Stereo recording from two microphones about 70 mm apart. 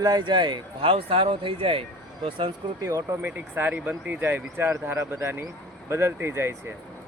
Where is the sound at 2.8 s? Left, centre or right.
Right.